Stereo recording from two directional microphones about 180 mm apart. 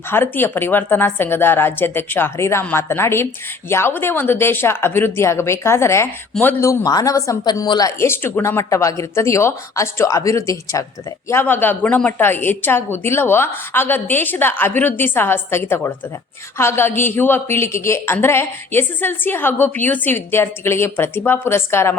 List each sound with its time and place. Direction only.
0.1 s a woman's voice: 10° left (ahead or behind)